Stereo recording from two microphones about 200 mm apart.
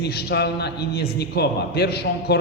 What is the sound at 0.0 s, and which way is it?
A man's voice, 55° left (ahead or behind).